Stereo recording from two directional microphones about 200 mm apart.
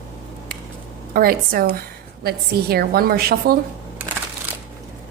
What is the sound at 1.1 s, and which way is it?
A woman's voice, 50° right (ahead or behind).